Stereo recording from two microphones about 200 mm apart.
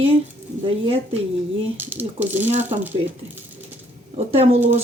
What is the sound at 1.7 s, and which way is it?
Speech, 10° right (ahead or behind).